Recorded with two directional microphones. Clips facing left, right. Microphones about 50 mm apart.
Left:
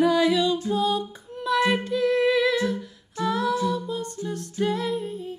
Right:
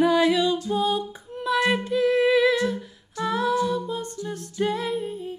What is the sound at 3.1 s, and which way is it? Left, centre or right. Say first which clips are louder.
Music: right 1 dB; right.